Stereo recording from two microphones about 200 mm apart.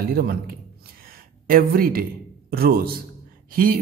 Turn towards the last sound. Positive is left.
turn(degrees=-45)  # may be behind; listen again after turning